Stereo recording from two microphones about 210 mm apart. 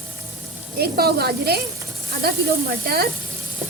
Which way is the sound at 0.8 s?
50° right (ahead or behind).